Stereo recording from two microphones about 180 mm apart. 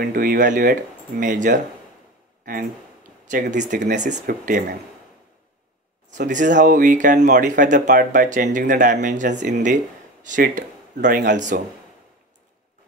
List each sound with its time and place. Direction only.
0.0 s speech: 55° right (ahead or behind)
3.3 s speech: 45° right (ahead or behind)
6.0 s speech: 45° right (ahead or behind)